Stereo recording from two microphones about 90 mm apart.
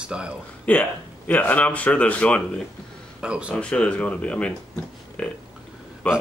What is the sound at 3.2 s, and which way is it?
Speech, 10° right (ahead or behind).